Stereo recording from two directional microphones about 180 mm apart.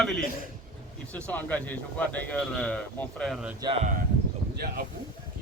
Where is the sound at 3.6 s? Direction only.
30° right (ahead or behind).